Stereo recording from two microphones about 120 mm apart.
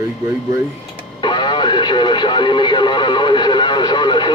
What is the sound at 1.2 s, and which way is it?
Radio, 40° left (ahead or behind).